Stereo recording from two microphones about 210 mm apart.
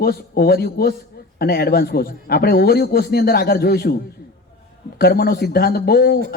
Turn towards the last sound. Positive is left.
turn(degrees=50)  # may be behind; listen again after turning